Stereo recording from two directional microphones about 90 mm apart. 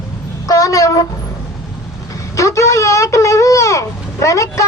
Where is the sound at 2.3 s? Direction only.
35° left (ahead or behind).